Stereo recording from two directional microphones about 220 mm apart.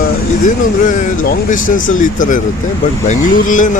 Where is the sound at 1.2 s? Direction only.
35° left (ahead or behind).